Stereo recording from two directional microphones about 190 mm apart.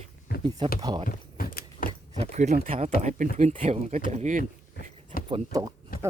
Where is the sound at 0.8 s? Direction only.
20° right (ahead or behind).